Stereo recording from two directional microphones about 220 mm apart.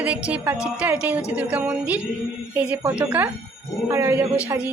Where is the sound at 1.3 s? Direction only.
5° right (ahead or behind).